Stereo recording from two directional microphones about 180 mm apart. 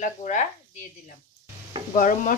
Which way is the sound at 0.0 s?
45° left (ahead or behind).